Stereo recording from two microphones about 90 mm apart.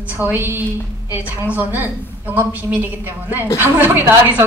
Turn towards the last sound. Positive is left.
turn(degrees=-20)  # may be behind; listen again after turning